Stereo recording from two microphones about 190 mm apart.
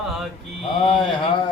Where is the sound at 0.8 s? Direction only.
30° left (ahead or behind).